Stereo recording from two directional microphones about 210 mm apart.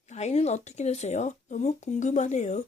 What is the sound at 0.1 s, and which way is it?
Speech, 30° left (ahead or behind).